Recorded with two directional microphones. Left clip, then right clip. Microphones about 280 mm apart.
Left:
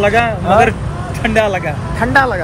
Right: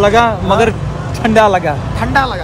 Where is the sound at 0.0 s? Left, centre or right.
Centre.